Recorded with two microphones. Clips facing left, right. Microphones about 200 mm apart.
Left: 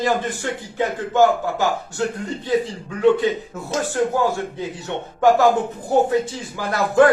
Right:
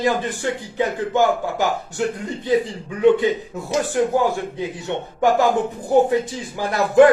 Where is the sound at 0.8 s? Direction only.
15° right (ahead or behind).